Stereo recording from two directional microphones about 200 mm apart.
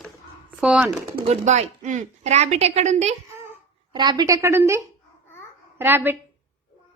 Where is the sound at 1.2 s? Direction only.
35° right (ahead or behind).